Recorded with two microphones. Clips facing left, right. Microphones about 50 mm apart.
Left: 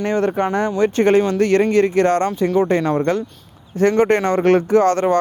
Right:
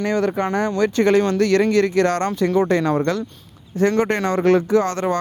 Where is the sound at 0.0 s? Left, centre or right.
Left.